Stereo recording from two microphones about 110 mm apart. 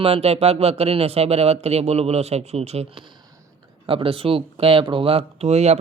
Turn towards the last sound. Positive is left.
turn(degrees=-80)